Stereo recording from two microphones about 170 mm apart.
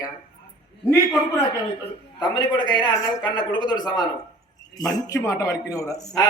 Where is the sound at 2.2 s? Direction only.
25° left (ahead or behind).